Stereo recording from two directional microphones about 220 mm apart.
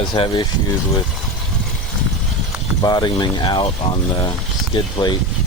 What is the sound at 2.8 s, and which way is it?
Speech, 15° left (ahead or behind).